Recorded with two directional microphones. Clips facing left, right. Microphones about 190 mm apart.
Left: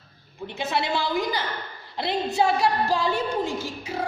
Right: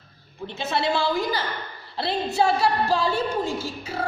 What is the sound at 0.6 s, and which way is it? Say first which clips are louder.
A woman's voice: right 2 dB; 15° left (ahead or behind).